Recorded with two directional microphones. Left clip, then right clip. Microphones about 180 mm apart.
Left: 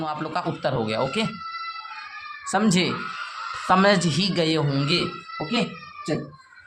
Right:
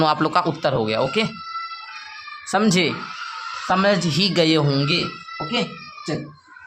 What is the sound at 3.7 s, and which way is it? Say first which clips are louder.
Speech: even; 5° left (ahead or behind).